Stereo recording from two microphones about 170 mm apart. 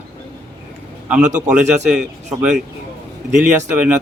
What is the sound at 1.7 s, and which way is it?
Speech, 5° right (ahead or behind).